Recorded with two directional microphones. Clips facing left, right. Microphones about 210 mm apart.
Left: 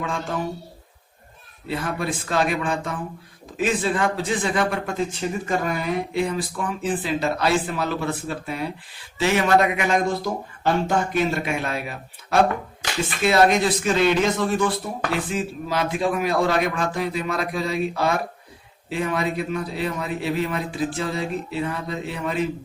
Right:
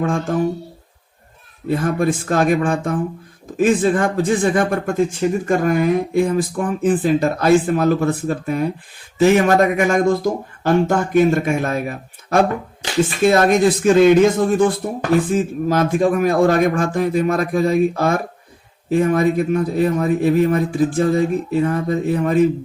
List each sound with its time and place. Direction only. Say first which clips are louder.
0.0 s speech: right 8 dB; 50° right (ahead or behind)
1.6 s speech: right 8 dB; 50° right (ahead or behind)